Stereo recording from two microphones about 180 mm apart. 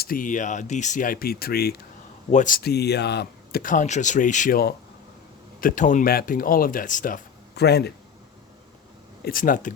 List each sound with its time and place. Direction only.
0.0 s speech: 50° left (ahead or behind)
2.3 s speech: 45° left (ahead or behind); by 7.9 s 65° left (ahead or behind)
9.2 s speech: 50° left (ahead or behind)